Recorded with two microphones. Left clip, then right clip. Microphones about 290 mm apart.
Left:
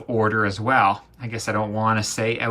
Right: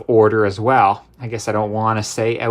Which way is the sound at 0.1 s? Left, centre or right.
Right.